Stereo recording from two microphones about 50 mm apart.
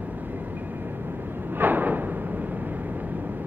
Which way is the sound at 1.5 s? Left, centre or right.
Right.